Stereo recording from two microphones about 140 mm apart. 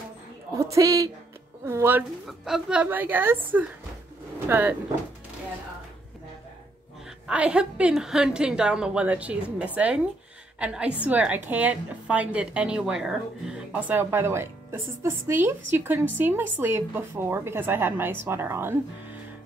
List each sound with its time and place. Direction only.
0.6 s a woman's voice: 25° right (ahead or behind)
2.2 s a woman's voice: 5° right (ahead or behind)
7.2 s a woman's voice: 10° right (ahead or behind)